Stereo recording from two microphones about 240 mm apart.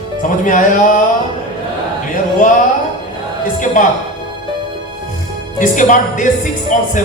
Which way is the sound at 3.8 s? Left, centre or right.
Left.